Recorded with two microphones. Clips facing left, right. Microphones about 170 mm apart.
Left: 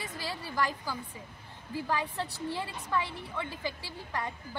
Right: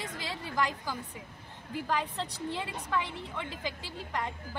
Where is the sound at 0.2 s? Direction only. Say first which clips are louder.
Even; 20° right (ahead or behind).